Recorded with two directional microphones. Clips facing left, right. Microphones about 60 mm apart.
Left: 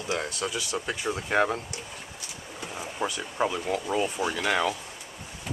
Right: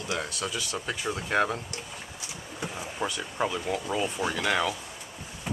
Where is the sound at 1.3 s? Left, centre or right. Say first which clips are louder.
Left 1 dB; centre.